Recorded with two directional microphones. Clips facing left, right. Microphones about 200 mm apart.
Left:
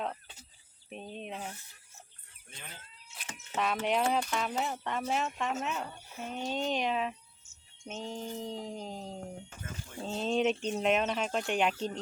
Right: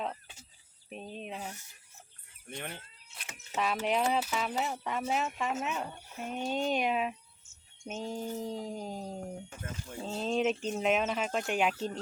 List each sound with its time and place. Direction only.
0.9 s speech: centre (ahead or behind)
2.6 s speech: 60° right (ahead or behind)
3.2 s speech: centre (ahead or behind)